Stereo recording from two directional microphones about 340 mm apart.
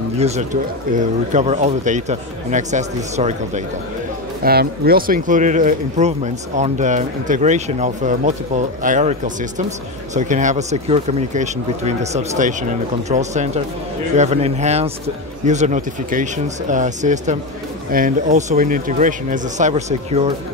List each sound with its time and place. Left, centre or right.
0.2 s speech: centre